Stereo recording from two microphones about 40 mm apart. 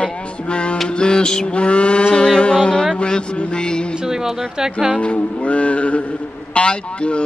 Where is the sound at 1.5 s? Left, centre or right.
Left.